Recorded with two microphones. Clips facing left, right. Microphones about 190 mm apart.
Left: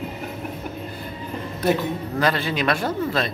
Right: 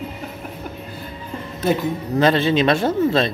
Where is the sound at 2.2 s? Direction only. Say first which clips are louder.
Right 7 dB; 25° right (ahead or behind).